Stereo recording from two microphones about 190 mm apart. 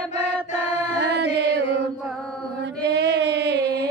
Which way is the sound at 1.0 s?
65° right (ahead or behind).